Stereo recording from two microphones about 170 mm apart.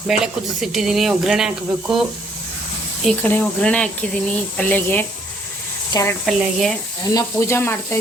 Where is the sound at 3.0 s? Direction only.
5° left (ahead or behind).